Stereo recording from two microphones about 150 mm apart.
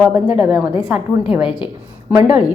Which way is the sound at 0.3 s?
5° right (ahead or behind).